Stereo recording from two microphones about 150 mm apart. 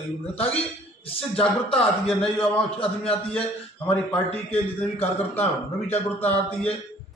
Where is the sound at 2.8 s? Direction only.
40° left (ahead or behind).